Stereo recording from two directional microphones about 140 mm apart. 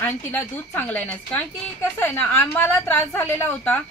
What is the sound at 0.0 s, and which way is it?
A woman's voice, 15° left (ahead or behind).